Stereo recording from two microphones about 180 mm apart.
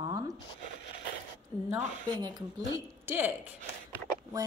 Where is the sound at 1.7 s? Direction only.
20° right (ahead or behind).